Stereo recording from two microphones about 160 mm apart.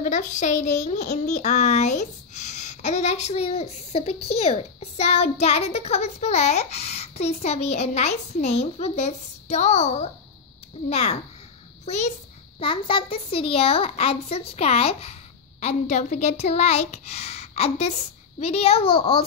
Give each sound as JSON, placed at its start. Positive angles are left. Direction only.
{"t": 0.0, "sound": "a child's voice", "side_deg": 50}
{"t": 12.5, "sound": "a child's voice", "side_deg": 35}